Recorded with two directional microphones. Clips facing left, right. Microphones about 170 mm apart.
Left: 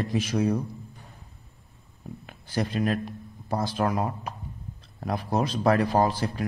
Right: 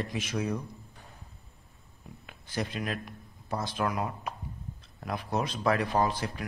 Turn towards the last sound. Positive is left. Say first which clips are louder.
# left 5 dB
turn(degrees=35)  # may be behind; listen again after turning